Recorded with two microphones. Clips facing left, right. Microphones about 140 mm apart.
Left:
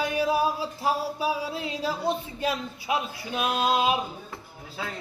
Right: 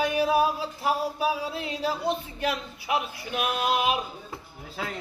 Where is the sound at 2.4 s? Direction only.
25° left (ahead or behind).